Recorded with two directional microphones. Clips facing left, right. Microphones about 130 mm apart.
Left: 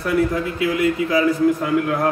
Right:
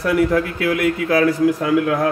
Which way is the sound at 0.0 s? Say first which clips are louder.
Right 3 dB; 65° right (ahead or behind).